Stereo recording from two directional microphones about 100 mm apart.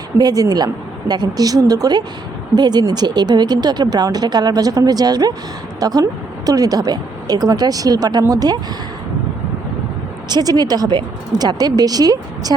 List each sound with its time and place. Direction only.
0.2 s speech: 40° right (ahead or behind)
10.2 s speech: 40° right (ahead or behind)